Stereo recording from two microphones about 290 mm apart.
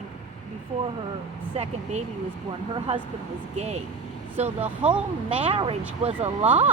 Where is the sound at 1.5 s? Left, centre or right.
Right.